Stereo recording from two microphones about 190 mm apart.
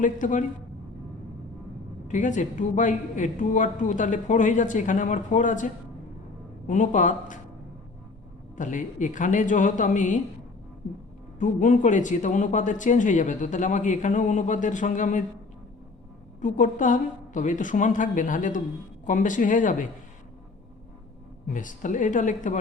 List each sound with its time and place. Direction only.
0.0 s speech: 40° left (ahead or behind)
2.0 s speech: 40° left (ahead or behind)
8.5 s speech: 40° left (ahead or behind)
11.3 s speech: 40° left (ahead or behind)
16.4 s a woman's voice: 40° left (ahead or behind)
21.4 s speech: 45° left (ahead or behind)